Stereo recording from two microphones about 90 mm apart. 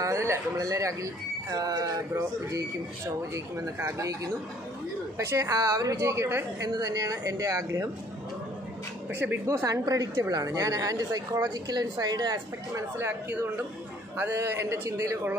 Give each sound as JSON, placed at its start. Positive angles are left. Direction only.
{"t": 0.0, "sound": "a woman's voice", "side_deg": -30}
{"t": 6.7, "sound": "a woman's voice", "side_deg": -45}
{"t": 9.5, "sound": "a woman's voice", "side_deg": -35}
{"t": 12.7, "sound": "a woman's voice", "side_deg": -30}